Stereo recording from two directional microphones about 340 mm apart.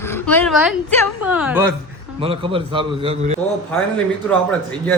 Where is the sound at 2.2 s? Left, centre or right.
Centre.